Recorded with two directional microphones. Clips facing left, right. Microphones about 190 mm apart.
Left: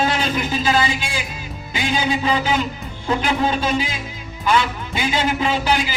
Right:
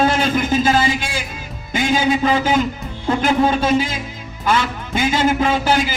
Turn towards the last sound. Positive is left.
turn(degrees=-45)  # may be behind; listen again after turning